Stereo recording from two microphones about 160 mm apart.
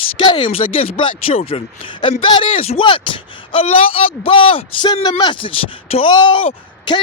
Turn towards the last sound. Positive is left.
turn(degrees=30)  # may be behind; listen again after turning